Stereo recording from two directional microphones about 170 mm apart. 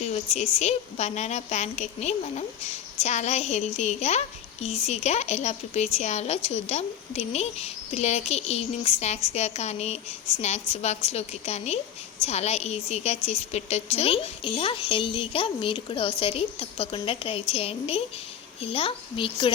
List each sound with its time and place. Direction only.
0.0 s a woman's voice: 40° left (ahead or behind)